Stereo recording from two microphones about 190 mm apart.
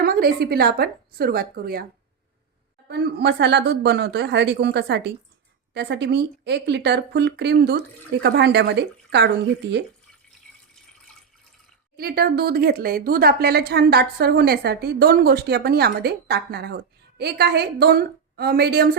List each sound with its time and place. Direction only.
0.0 s a woman's voice: 55° right (ahead or behind)
2.8 s a woman's voice: 60° right (ahead or behind)
11.9 s a woman's voice: 55° right (ahead or behind)